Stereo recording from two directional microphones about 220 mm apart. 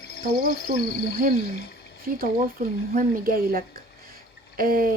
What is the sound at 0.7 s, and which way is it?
Speech, 40° right (ahead or behind).